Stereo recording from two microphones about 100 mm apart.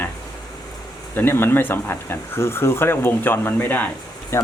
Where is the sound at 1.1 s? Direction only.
25° left (ahead or behind).